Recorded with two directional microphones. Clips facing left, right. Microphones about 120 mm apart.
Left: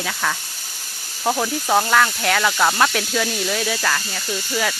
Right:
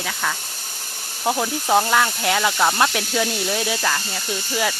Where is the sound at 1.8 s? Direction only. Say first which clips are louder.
Left 1 dB; 15° right (ahead or behind).